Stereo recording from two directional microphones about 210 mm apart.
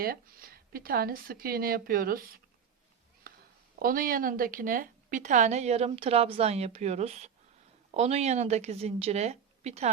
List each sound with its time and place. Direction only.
0.0 s a woman's voice: 45° right (ahead or behind)
3.3 s a sound: 45° right (ahead or behind)
3.8 s a woman's voice: 40° right (ahead or behind)